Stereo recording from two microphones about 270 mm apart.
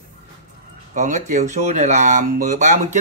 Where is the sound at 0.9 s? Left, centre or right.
Right.